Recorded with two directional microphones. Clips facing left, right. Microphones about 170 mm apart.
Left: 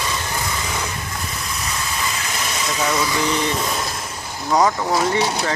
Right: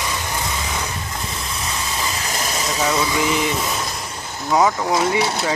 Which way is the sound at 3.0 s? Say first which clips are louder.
Right 1 dB; 15° right (ahead or behind).